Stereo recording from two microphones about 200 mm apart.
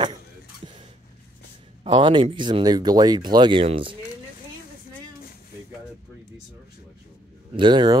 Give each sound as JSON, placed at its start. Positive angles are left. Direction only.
{"t": 0.6, "sound": "a sound", "side_deg": -25}
{"t": 1.9, "sound": "speech", "side_deg": -25}
{"t": 7.5, "sound": "speech", "side_deg": -20}